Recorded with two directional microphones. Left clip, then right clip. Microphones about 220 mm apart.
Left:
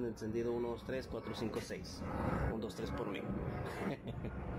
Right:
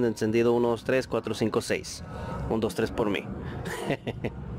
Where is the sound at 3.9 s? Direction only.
25° right (ahead or behind).